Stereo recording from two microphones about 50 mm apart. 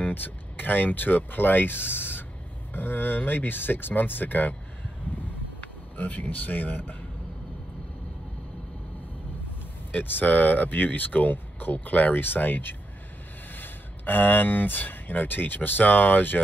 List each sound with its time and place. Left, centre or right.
0.0 s speech: left
5.6 s speech: left
9.9 s speech: left